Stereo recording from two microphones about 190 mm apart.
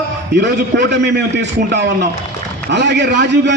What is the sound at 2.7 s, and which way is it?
Speech, 65° right (ahead or behind).